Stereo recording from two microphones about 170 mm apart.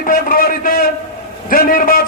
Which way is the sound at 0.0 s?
55° left (ahead or behind).